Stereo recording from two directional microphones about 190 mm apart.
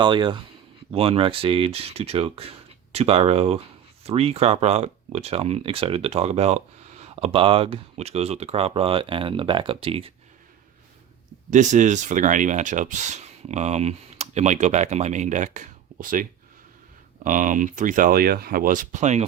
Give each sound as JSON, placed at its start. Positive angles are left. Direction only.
{"t": 0.0, "sound": "speech", "side_deg": -25}
{"t": 11.5, "sound": "speech", "side_deg": -40}
{"t": 17.2, "sound": "speech", "side_deg": -45}